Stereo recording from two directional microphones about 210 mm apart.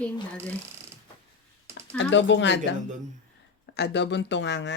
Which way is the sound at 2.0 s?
60° left (ahead or behind).